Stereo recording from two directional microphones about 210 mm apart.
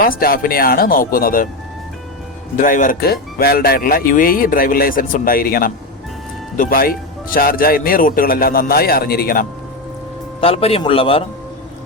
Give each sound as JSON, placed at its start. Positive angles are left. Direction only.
{"t": 0.0, "sound": "speech", "side_deg": 45}
{"t": 2.6, "sound": "speech", "side_deg": 40}
{"t": 10.4, "sound": "a man's voice", "side_deg": 30}